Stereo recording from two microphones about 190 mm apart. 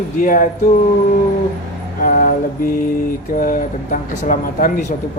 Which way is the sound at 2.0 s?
45° left (ahead or behind).